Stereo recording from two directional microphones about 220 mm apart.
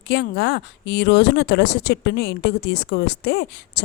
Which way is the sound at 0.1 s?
50° left (ahead or behind).